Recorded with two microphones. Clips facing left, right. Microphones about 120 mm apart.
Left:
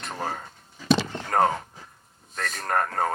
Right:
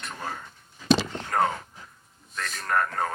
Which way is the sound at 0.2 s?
40° left (ahead or behind).